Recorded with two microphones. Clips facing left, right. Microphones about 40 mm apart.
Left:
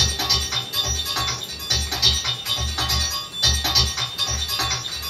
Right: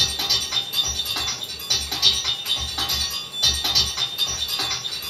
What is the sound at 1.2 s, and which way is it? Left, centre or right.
Music, left.